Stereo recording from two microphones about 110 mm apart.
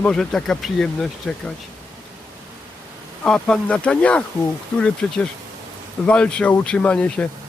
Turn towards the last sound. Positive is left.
turn(degrees=10)  # may be behind; listen again after turning